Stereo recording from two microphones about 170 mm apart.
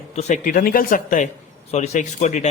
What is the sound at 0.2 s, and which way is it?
Speech, 50° left (ahead or behind).